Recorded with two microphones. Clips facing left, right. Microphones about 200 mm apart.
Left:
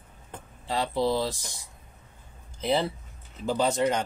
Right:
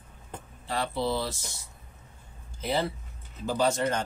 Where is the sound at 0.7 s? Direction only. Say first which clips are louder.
Left 3 dB; 15° left (ahead or behind).